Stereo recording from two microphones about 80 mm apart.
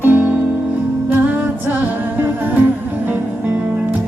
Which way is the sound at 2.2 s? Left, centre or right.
Right.